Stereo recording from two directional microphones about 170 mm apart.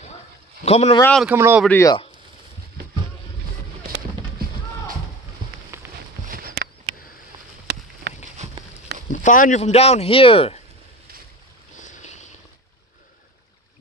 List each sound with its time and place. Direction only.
0.7 s speech: 35° left (ahead or behind)
1.2 s speech: 10° right (ahead or behind)
1.7 s speech: 15° left (ahead or behind)
3.8 s music: 60° right (ahead or behind)
5.7 s a sound: 15° right (ahead or behind)
6.2 s a sound: 60° right (ahead or behind); by 8.2 s 75° right (ahead or behind)
9.1 s speech: 50° left (ahead or behind); by 10.6 s 35° left (ahead or behind)
11.8 s boat: 45° left (ahead or behind)